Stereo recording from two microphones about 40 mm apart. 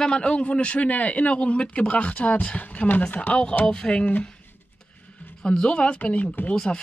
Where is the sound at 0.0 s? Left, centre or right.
Left.